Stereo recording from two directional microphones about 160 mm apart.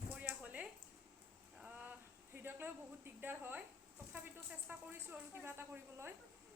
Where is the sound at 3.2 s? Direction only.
10° right (ahead or behind).